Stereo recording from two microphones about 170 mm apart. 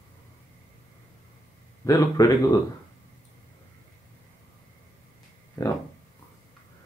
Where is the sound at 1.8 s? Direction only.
20° left (ahead or behind).